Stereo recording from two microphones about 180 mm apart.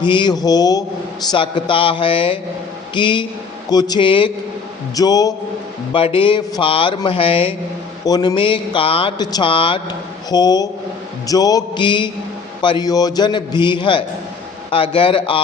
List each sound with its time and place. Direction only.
0.0 s speech: 25° left (ahead or behind)
8.0 s speech: 20° left (ahead or behind)